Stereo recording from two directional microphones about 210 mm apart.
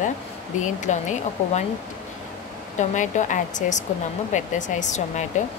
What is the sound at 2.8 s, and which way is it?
A woman's voice, 35° left (ahead or behind).